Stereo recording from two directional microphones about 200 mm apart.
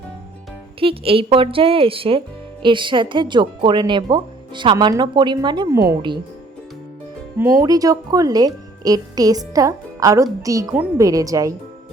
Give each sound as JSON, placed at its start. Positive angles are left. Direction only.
{"t": 0.8, "sound": "speech", "side_deg": -30}
{"t": 7.3, "sound": "speech", "side_deg": -10}